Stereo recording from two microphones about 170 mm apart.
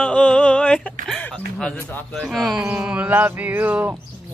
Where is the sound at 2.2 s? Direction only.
Centre (ahead or behind).